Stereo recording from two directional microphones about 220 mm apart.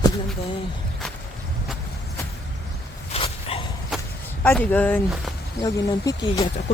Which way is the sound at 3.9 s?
Centre (ahead or behind).